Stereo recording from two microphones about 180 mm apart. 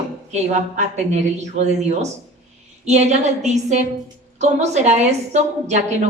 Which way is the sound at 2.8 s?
40° right (ahead or behind).